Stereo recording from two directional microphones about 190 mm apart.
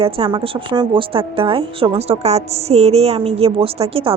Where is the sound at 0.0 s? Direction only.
25° right (ahead or behind).